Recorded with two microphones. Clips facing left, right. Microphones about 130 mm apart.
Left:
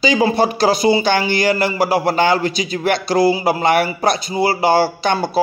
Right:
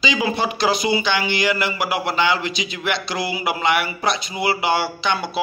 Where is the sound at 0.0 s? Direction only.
40° left (ahead or behind).